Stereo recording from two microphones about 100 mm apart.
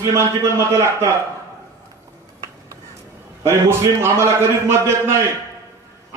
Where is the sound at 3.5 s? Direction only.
25° right (ahead or behind).